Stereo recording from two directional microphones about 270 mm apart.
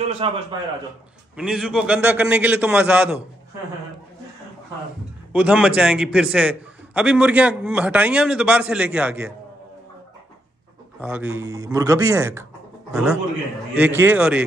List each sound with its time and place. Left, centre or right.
0.0 s a man's voice: right
1.3 s a man's voice: centre
5.3 s a man's voice: centre
11.0 s a man's voice: centre